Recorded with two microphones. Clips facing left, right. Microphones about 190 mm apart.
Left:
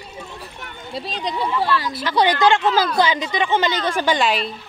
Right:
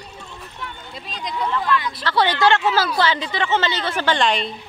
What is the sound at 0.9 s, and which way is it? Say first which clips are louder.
Speech: left 8 dB; 35° left (ahead or behind).